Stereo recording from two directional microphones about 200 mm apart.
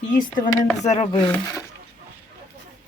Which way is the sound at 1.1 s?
20° left (ahead or behind).